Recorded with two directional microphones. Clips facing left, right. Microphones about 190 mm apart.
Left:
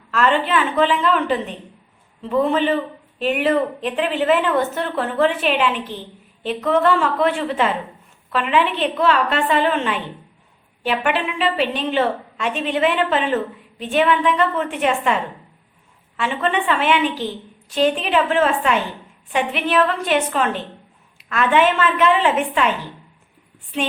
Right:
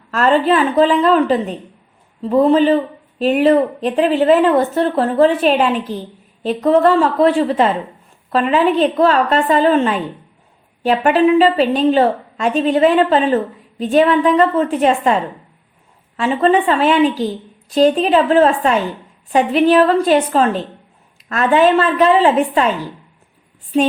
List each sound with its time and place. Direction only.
0.1 s a woman's voice: 40° right (ahead or behind)
23.7 s a woman's voice: 35° right (ahead or behind)